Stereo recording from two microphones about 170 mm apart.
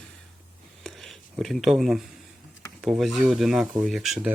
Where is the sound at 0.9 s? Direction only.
Centre (ahead or behind).